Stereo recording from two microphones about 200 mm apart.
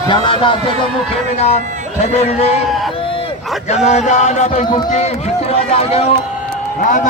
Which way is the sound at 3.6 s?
35° left (ahead or behind).